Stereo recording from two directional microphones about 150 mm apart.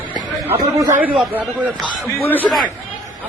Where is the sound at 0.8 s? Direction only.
10° right (ahead or behind).